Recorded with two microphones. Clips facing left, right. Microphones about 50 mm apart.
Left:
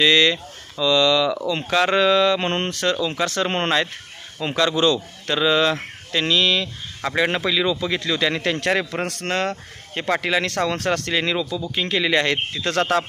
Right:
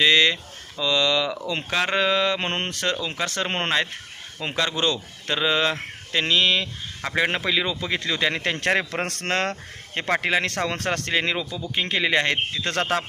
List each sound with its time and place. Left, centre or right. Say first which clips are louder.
0.0 s speech: left 2 dB; centre; by 9.0 s right
9.0 s speech: left 1 dB; right
10.1 s speech: left 1 dB; right